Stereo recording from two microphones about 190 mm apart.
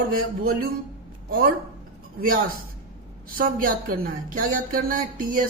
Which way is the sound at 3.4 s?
50° right (ahead or behind).